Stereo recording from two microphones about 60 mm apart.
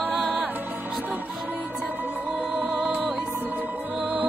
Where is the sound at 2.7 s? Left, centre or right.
Centre.